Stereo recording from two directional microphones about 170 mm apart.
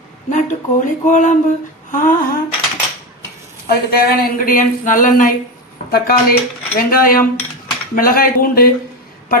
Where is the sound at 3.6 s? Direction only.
60° left (ahead or behind).